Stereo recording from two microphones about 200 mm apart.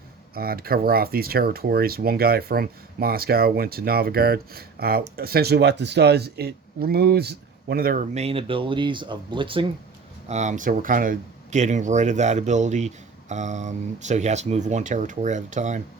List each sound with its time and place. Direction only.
0.3 s speech: 50° right (ahead or behind)
8.1 s speech: 30° right (ahead or behind)
10.2 s speech: 35° right (ahead or behind)